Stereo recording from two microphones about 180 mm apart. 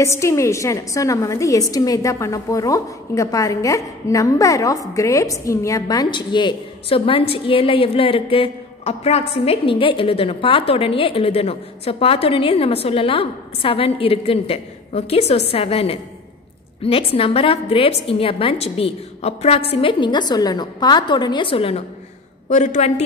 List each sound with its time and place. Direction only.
0.0 s a woman's voice: 15° left (ahead or behind); by 23.0 s 35° left (ahead or behind)